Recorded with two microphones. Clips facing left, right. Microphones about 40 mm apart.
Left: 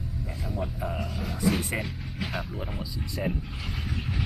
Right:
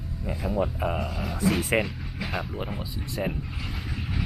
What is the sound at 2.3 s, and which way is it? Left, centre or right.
Speech, centre.